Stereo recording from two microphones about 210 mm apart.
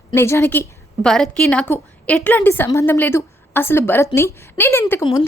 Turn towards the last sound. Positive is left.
turn(degrees=10)  # may be behind; listen again after turning